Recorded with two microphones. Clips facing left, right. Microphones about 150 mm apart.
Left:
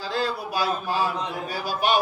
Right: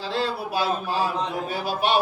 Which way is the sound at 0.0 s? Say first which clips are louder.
Right 1 dB; 30° right (ahead or behind).